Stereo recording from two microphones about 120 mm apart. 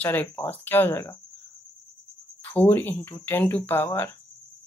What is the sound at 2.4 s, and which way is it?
Speech, 15° left (ahead or behind).